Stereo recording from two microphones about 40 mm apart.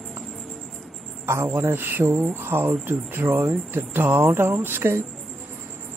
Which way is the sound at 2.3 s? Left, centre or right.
Right.